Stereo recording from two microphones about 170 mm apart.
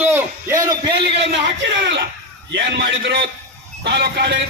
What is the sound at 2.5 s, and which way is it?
A man's voice, 90° right.